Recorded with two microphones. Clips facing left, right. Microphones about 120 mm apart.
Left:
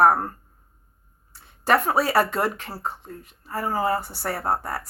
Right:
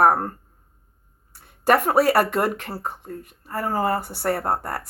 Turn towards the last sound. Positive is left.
turn(degrees=-55)  # may be behind; listen again after turning